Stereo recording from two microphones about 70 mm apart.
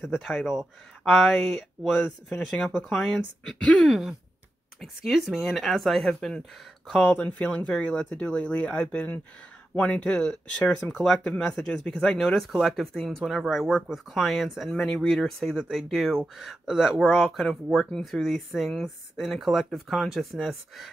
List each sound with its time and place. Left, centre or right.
0.0 s speech: centre
7.2 s speech: centre
11.0 s speech: centre